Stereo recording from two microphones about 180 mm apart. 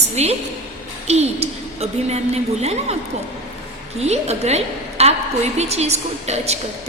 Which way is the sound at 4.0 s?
35° right (ahead or behind).